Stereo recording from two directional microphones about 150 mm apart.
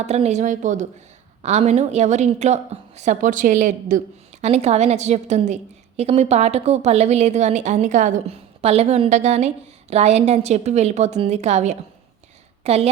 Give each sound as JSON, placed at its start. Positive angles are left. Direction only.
{"t": 0.0, "sound": "a woman's voice", "side_deg": -45}